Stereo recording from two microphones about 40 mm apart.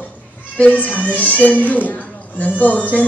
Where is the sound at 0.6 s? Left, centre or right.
Left.